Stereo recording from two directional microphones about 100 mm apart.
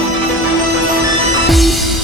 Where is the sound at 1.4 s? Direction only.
Centre (ahead or behind).